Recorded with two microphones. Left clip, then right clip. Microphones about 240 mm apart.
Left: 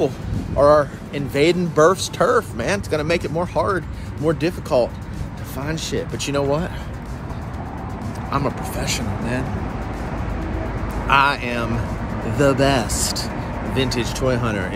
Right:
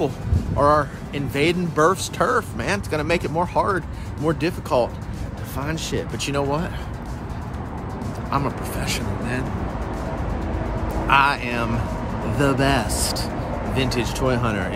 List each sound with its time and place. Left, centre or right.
0.6 s speech: centre
8.3 s speech: centre
11.1 s speech: centre